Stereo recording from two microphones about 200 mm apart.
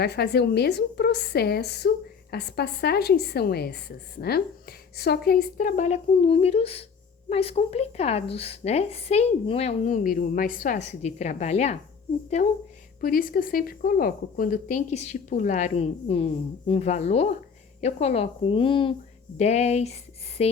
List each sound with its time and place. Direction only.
0.0 s a woman's voice: 55° left (ahead or behind); by 11.8 s 35° left (ahead or behind)
13.0 s a woman's voice: 45° left (ahead or behind)
20.4 s a sound: 30° left (ahead or behind)